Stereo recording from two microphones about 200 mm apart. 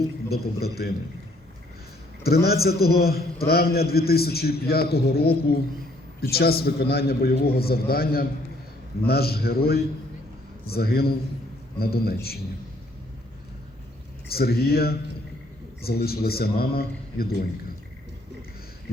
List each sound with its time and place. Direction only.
0.3 s a man's voice: 50° left (ahead or behind)
2.2 s a man's voice: 50° left (ahead or behind)
14.3 s a man's voice: 50° left (ahead or behind)